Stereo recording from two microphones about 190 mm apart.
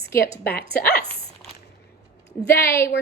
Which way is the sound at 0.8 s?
55° left (ahead or behind).